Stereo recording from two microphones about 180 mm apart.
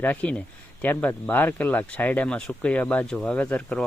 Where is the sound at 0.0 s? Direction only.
10° left (ahead or behind).